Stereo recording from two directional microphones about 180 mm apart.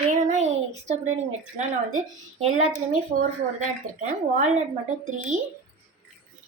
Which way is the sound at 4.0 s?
40° right (ahead or behind).